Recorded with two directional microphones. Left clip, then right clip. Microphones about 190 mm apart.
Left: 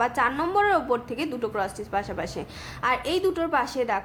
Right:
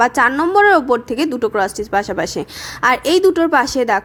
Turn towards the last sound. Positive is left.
turn(degrees=-45)  # may be behind; listen again after turning